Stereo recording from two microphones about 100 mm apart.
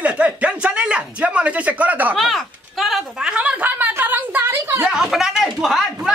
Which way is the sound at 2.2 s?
Centre (ahead or behind).